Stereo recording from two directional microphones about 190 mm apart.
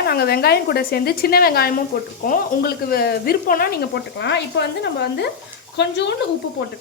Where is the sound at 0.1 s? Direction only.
55° left (ahead or behind).